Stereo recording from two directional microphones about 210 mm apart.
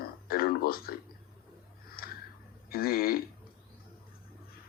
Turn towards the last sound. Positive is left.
turn(degrees=45)  # may be behind; listen again after turning